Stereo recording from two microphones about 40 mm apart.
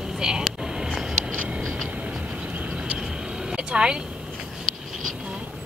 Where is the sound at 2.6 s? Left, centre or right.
Right.